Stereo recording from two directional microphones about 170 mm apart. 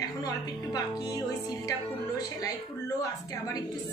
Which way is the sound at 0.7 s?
20° left (ahead or behind).